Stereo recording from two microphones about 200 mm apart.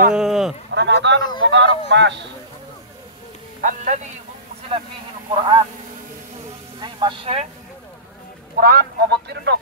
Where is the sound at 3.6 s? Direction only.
40° right (ahead or behind).